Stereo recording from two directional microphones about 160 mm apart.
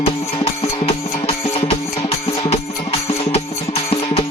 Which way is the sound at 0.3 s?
30° left (ahead or behind).